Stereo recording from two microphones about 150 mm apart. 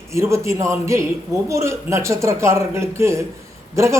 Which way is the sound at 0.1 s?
20° right (ahead or behind).